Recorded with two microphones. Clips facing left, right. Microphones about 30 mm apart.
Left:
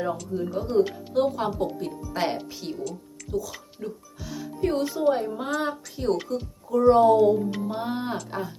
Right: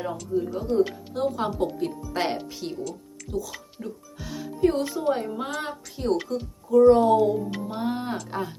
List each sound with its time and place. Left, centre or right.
0.0 s speech: centre
0.9 s speech: centre
1.9 s speech: centre
2.1 s speech: centre
4.2 s speech: centre